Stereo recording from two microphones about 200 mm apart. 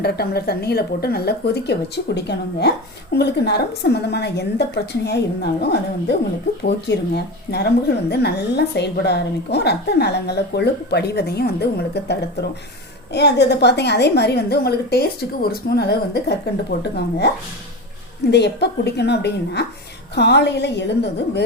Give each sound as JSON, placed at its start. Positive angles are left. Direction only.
{"t": 0.0, "sound": "a woman's voice", "side_deg": 50}
{"t": 18.3, "sound": "a woman's voice", "side_deg": 55}